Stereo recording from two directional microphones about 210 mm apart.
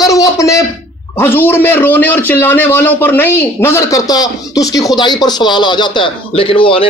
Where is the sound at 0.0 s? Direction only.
15° left (ahead or behind).